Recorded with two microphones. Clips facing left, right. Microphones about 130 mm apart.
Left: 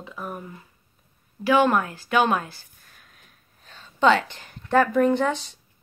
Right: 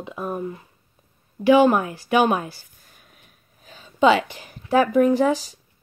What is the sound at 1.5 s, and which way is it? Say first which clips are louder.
Speech: right 4 dB; 15° right (ahead or behind).